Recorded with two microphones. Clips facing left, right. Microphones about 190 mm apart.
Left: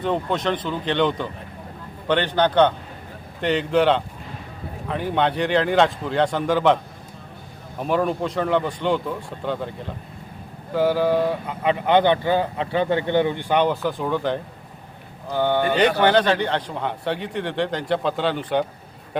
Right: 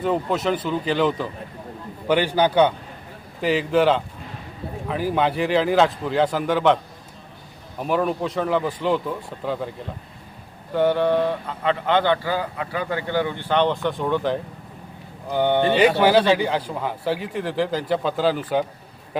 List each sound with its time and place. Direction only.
0.0 s a man's voice: 5° right (ahead or behind)
7.8 s speech: centre (ahead or behind)
15.3 s speech: 20° right (ahead or behind)
16.0 s speech: 5° right (ahead or behind)